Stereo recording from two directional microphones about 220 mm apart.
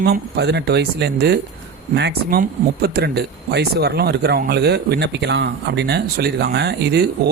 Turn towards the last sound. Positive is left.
turn(degrees=-45)  # may be behind; listen again after turning